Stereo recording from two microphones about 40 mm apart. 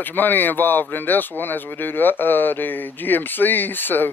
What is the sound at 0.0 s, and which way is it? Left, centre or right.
Speech, left.